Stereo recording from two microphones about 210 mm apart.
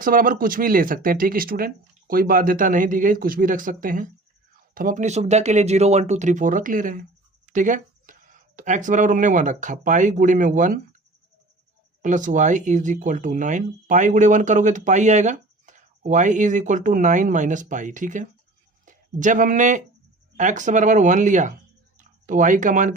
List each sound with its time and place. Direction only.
0.0 s speech: 40° right (ahead or behind)
12.0 s speech: 35° right (ahead or behind)
21.9 s a sound: 40° right (ahead or behind)